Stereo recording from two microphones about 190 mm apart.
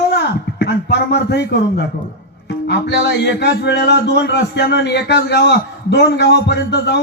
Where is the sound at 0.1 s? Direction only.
60° left (ahead or behind).